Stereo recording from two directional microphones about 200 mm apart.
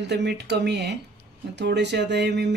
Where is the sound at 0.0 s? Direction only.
60° right (ahead or behind).